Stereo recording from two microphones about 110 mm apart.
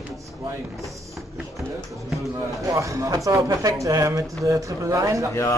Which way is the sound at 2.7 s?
30° right (ahead or behind).